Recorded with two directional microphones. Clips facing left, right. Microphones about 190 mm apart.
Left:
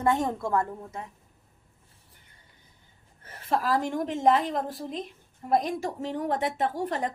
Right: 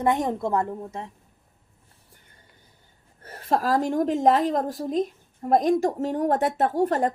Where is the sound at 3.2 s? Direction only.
40° right (ahead or behind).